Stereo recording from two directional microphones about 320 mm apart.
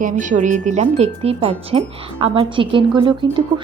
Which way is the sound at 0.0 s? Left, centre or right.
Right.